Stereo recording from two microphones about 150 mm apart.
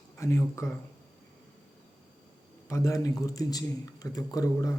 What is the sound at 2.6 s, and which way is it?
A man's voice, 20° left (ahead or behind).